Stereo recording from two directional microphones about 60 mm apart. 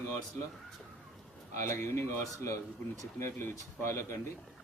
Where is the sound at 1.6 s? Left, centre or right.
Left.